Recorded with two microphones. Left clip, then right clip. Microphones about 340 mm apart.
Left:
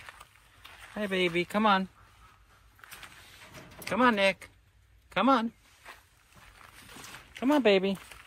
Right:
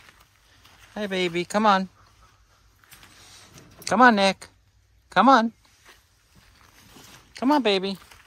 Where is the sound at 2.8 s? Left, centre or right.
Centre.